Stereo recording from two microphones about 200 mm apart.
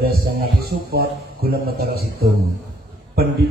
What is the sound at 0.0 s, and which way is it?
A man's voice, 50° right (ahead or behind).